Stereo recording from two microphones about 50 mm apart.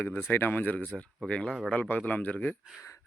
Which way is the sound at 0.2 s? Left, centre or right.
Left.